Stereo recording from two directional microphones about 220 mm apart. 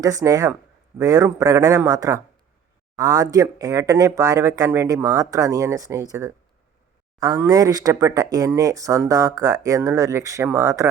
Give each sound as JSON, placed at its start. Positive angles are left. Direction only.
{"t": 0.0, "sound": "speech", "side_deg": -15}